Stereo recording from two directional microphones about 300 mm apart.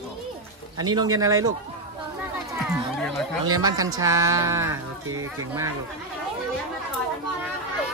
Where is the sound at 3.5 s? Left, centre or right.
Centre.